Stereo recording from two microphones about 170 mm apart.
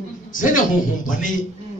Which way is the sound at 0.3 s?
50° left (ahead or behind).